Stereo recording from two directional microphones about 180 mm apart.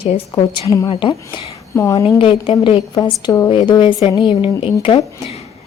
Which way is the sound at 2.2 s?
30° left (ahead or behind).